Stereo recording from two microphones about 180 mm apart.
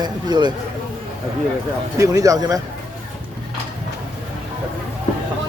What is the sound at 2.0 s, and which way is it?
Speech, 20° right (ahead or behind).